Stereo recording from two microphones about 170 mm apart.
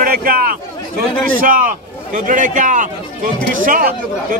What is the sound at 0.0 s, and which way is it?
A man's voice, 60° right (ahead or behind).